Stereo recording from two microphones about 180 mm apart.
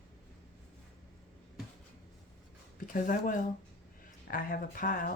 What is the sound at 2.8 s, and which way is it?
Speech, 50° left (ahead or behind).